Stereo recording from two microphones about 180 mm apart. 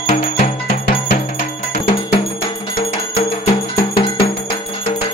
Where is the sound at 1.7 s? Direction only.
30° left (ahead or behind).